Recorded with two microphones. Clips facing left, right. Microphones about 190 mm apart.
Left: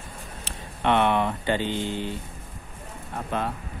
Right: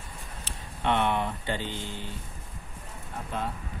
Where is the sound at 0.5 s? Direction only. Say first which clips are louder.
Left 4 dB; 80° left.